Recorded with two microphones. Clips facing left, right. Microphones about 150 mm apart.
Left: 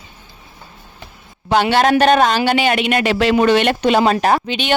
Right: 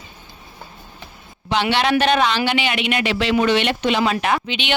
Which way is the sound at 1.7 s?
45° left (ahead or behind).